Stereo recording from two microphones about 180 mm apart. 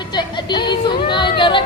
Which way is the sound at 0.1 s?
25° left (ahead or behind).